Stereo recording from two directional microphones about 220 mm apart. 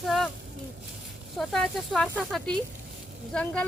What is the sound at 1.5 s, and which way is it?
Speech, 5° left (ahead or behind).